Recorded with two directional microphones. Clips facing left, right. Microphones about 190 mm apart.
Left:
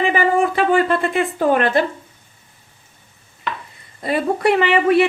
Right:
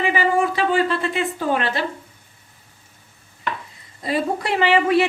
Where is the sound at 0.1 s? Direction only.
55° left (ahead or behind).